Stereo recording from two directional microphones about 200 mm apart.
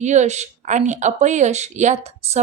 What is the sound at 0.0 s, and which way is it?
Speech, 35° right (ahead or behind).